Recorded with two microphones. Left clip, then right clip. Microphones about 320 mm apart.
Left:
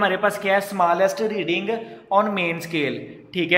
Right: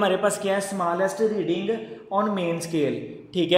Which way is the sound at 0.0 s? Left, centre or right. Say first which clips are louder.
Left 2 dB; centre.